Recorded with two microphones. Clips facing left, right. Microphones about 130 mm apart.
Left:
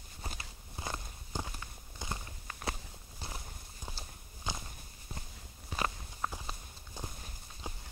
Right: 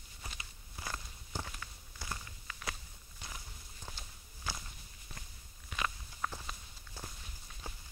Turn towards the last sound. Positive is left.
turn(degrees=15)  # may be behind; listen again after turning